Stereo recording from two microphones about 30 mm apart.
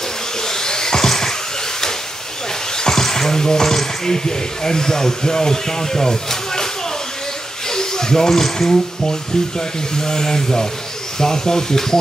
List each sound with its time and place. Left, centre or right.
0.4 s a sound: centre
2.8 s speech: centre
7.7 s speech: centre